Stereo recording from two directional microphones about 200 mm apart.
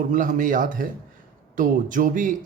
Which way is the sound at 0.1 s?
40° right (ahead or behind).